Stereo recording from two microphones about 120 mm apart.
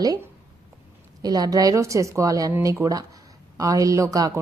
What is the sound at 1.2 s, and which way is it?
A woman's voice, 30° right (ahead or behind).